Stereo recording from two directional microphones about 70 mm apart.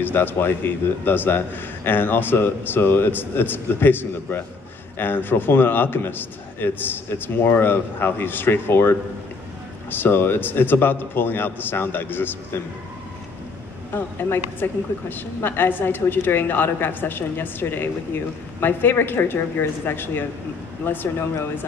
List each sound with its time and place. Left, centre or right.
0.0 s a man's voice: left
13.9 s a man's voice: left